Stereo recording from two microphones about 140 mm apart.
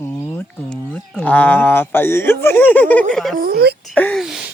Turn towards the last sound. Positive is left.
turn(degrees=-5)  # may be behind; listen again after turning